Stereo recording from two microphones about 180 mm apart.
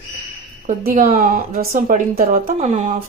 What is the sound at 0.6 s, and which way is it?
A woman's voice, 50° right (ahead or behind).